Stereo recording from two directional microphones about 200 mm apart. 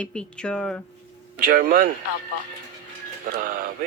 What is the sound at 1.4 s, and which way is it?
Speech, 45° right (ahead or behind).